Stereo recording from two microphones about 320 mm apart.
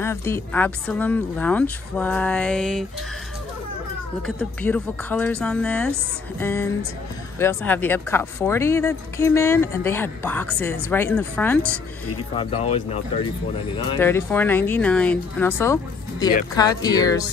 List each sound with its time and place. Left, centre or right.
0.0 s a woman's voice: centre
4.4 s a woman's voice: centre
12.4 s speech: centre
13.7 s speech: centre